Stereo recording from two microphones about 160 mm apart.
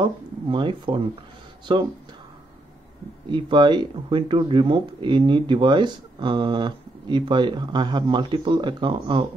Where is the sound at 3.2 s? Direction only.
30° right (ahead or behind).